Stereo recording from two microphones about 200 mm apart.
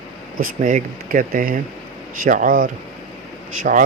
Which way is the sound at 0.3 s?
45° right (ahead or behind).